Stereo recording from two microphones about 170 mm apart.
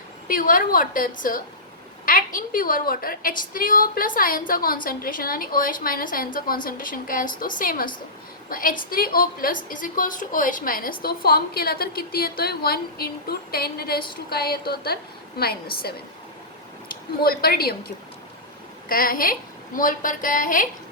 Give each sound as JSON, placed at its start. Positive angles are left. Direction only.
{"t": 0.3, "sound": "a woman's voice", "side_deg": 55}
{"t": 14.3, "sound": "a sound", "side_deg": 65}
{"t": 15.4, "sound": "a woman's voice", "side_deg": 65}